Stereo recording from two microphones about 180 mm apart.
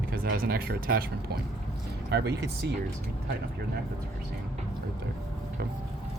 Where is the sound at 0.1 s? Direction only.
55° right (ahead or behind).